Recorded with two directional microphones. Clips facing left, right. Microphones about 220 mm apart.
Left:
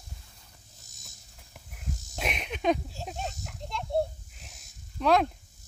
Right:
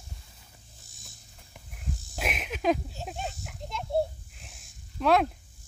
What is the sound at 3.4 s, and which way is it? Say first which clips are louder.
Children playing: even; 5° right (ahead or behind).